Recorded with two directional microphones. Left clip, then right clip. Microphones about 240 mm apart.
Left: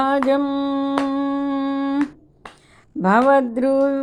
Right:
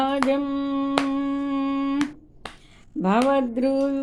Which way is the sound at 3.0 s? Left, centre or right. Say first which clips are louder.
Left 6 dB; left.